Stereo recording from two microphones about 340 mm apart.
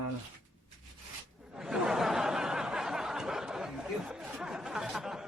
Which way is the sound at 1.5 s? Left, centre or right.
Centre.